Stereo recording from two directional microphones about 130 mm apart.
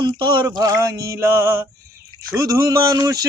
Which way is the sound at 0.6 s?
30° right (ahead or behind).